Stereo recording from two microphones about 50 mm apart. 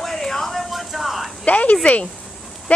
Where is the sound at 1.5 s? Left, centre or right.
Left.